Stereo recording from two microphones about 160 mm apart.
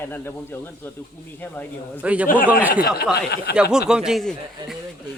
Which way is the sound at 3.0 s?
90° left.